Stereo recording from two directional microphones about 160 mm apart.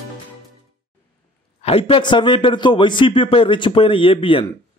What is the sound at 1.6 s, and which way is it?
A man's voice, 35° left (ahead or behind).